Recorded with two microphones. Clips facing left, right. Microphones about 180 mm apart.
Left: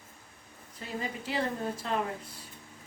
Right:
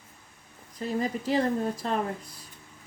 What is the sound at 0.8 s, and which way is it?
Speech, 40° right (ahead or behind).